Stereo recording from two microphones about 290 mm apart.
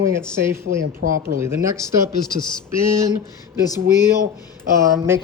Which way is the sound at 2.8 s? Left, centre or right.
Centre.